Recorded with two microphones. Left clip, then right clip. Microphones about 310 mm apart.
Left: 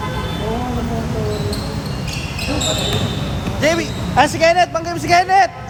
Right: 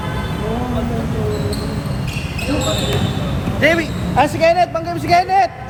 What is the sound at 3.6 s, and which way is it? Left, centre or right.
A man's voice, centre.